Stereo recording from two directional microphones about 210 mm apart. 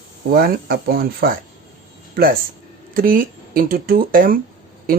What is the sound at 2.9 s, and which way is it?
Speech, 40° right (ahead or behind).